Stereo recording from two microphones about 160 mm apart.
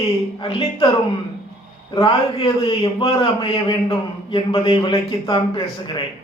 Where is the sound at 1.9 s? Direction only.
30° left (ahead or behind).